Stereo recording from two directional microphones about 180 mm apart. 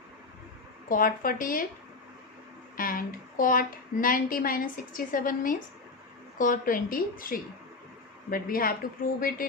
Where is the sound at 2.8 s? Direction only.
50° left (ahead or behind).